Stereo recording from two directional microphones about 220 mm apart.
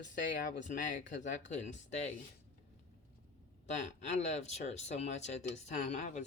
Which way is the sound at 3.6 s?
30° left (ahead or behind).